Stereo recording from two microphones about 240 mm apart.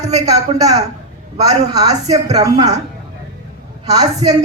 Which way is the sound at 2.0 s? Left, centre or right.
Right.